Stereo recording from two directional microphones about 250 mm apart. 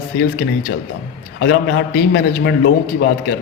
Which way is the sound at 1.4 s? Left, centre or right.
Left.